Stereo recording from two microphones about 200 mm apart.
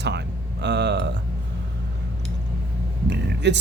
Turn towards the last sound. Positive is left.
turn(degrees=-60)  # may be behind; listen again after turning